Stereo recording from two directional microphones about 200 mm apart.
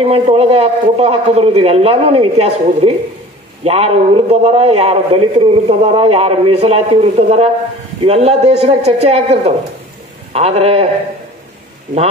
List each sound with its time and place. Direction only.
0.0 s a man's voice: 30° right (ahead or behind)